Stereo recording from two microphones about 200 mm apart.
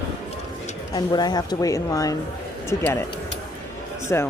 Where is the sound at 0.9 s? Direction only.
20° left (ahead or behind).